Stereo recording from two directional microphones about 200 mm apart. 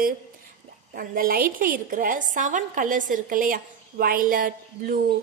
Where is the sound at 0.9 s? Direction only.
45° right (ahead or behind).